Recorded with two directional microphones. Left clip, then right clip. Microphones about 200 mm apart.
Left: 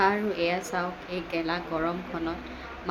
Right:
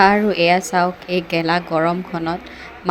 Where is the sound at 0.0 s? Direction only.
40° right (ahead or behind).